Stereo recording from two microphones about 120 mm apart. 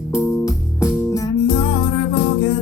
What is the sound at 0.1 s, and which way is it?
Music, 25° left (ahead or behind).